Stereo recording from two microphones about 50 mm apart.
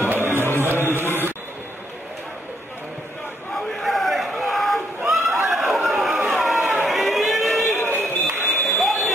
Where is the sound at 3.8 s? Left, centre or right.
Centre.